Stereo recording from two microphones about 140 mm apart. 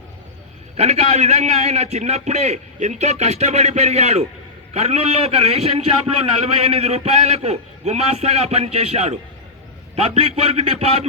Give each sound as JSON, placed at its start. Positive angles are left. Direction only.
{"t": 0.8, "sound": "a man's voice", "side_deg": -50}